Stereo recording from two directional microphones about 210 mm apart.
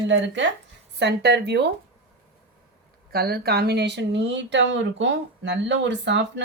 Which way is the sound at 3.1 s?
50° right (ahead or behind).